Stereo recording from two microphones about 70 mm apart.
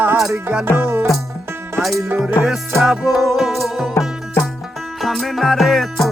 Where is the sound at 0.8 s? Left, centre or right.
Right.